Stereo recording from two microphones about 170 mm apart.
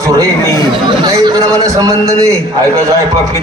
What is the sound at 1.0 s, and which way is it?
A man's voice, 25° right (ahead or behind).